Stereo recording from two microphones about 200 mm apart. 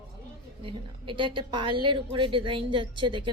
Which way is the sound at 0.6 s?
25° right (ahead or behind).